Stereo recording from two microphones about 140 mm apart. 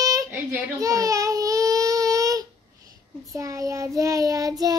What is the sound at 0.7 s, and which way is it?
Baby cry, 25° right (ahead or behind).